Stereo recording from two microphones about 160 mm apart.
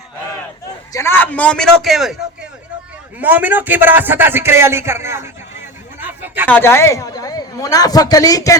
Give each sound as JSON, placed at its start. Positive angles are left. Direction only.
{"t": 0.9, "sound": "a man's voice", "side_deg": 15}
{"t": 6.2, "sound": "a sound", "side_deg": -10}
{"t": 6.5, "sound": "a man's voice", "side_deg": 15}